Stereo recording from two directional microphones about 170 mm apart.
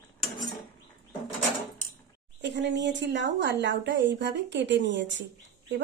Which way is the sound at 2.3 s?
90° right.